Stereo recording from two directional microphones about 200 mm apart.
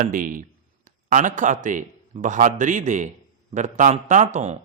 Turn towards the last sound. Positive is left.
turn(degrees=-35)  # may be behind; listen again after turning